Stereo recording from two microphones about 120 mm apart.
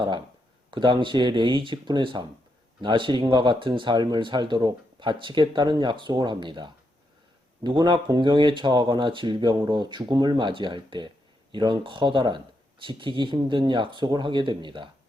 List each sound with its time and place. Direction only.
0.7 s speech: 40° right (ahead or behind)